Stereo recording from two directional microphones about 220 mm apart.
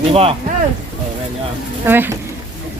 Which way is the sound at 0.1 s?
25° right (ahead or behind).